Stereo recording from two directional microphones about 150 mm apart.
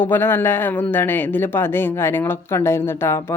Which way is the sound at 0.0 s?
15° left (ahead or behind).